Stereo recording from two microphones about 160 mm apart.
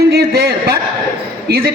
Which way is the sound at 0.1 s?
85° right.